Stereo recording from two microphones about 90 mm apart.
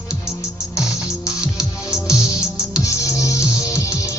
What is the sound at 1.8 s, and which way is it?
Music, 10° right (ahead or behind).